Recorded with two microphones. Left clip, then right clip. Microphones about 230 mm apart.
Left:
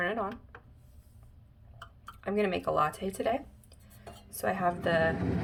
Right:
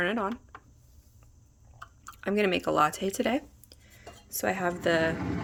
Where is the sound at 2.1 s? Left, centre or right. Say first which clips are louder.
Right 3 dB; right.